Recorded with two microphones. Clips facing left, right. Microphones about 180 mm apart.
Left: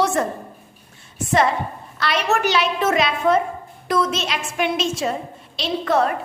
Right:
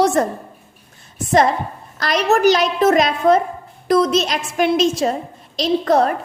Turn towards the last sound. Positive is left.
turn(degrees=-40)  # may be behind; listen again after turning